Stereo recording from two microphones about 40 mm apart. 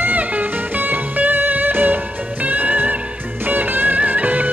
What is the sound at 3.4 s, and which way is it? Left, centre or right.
Music, right.